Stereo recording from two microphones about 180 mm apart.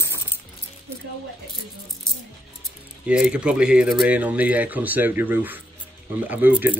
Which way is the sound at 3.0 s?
5° right (ahead or behind).